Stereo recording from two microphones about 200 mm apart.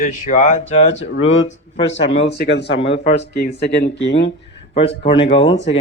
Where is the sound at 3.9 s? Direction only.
65° left (ahead or behind).